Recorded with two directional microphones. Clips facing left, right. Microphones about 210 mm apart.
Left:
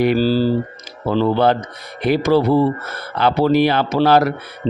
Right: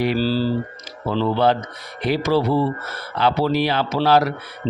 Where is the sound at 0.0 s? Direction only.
50° left (ahead or behind).